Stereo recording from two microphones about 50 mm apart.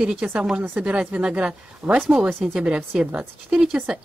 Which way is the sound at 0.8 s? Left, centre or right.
Right.